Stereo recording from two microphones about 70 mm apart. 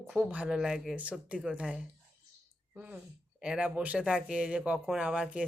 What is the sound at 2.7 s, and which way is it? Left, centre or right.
Speech, right.